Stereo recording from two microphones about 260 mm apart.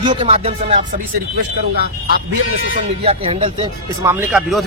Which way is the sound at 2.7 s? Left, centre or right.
Right.